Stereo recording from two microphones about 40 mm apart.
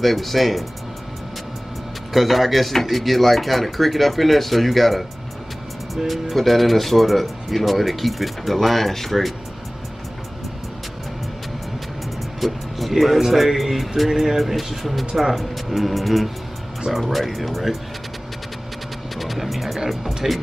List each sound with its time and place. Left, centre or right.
0.0 s speech: centre
2.1 s speech: centre
6.0 s speech: centre
12.4 s speech: centre
19.1 s music: centre
20.2 s speech: centre